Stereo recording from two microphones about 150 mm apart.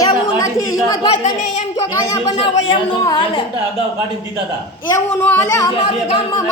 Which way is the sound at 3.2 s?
35° left (ahead or behind).